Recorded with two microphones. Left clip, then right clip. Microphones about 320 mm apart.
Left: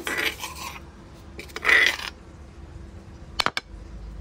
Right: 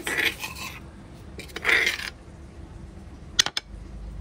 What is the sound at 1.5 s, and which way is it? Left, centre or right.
Filing, left.